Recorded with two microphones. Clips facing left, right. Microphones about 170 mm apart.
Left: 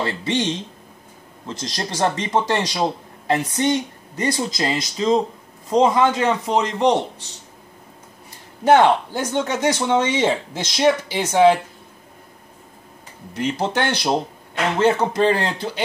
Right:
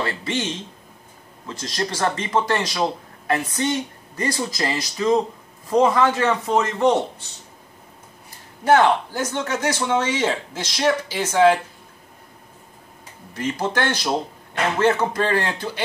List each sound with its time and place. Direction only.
0.0 s speech: 20° left (ahead or behind)
1.5 s a man's voice: 20° left (ahead or behind)
8.6 s speech: 25° left (ahead or behind)
13.4 s a man's voice: 15° left (ahead or behind)